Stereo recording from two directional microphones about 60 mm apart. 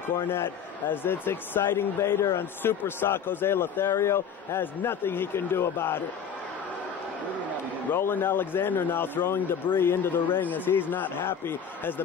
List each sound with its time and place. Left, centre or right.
0.3 s a man's voice: left
7.9 s a man's voice: left